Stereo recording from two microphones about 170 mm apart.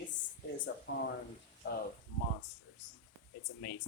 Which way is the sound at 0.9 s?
90° left.